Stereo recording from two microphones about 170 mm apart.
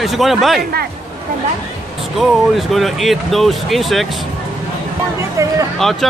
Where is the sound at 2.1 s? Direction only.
Centre (ahead or behind).